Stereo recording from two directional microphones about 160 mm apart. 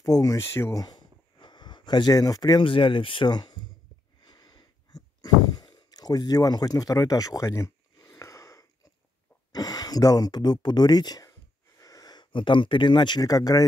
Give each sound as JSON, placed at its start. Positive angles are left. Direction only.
{"t": 0.0, "sound": "speech", "side_deg": 20}
{"t": 4.2, "sound": "a sound", "side_deg": 25}
{"t": 9.5, "sound": "speech", "side_deg": 25}